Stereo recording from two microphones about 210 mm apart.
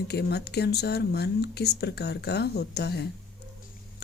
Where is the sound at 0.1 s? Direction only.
50° left (ahead or behind).